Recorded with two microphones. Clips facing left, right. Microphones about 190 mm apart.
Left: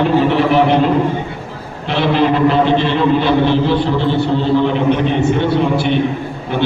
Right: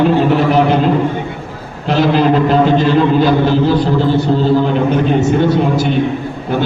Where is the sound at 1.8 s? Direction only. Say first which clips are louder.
Right 2 dB; 40° right (ahead or behind).